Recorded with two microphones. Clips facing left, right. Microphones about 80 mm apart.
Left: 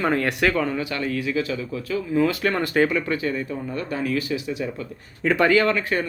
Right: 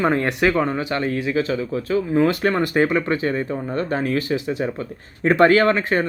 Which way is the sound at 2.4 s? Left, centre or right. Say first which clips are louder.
Right 2 dB; right.